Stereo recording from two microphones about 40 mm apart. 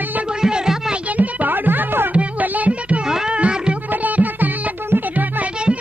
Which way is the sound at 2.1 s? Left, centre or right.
Right.